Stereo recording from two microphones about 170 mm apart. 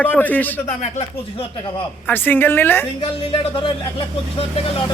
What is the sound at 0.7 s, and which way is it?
Speech, 45° left (ahead or behind).